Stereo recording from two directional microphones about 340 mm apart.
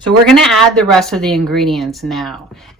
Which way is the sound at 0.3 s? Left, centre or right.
Centre.